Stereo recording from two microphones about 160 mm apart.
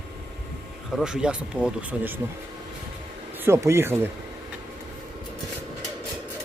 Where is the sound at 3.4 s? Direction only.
15° right (ahead or behind).